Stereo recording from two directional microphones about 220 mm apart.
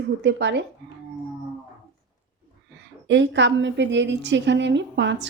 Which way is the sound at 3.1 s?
55° right (ahead or behind).